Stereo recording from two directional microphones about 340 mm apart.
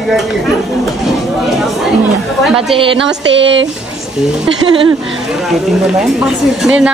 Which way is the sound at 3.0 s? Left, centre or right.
Right.